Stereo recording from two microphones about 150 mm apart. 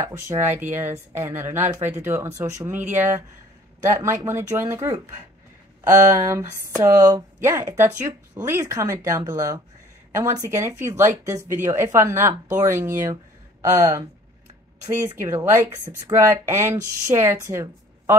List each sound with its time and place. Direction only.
0.0 s speech: 15° right (ahead or behind)